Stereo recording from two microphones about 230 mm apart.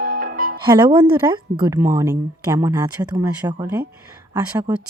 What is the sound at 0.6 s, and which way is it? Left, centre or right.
Speech, centre.